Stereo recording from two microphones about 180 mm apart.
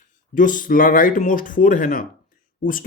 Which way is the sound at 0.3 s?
45° left (ahead or behind).